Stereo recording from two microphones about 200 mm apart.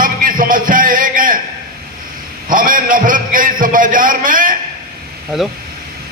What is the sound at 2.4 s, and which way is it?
A man's voice, 45° right (ahead or behind).